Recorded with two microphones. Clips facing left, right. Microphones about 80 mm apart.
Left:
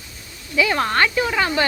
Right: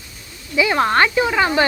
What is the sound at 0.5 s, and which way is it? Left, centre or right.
Speech, centre.